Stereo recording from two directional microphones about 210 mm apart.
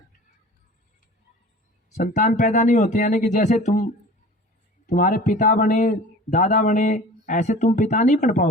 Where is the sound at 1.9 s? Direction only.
35° left (ahead or behind).